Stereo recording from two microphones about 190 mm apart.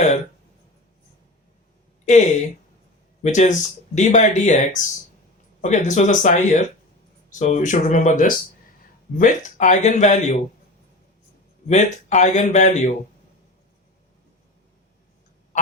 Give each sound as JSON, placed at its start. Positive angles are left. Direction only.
{"t": 2.0, "sound": "speech", "side_deg": 40}
{"t": 11.7, "sound": "speech", "side_deg": 35}
{"t": 15.5, "sound": "goose", "side_deg": 40}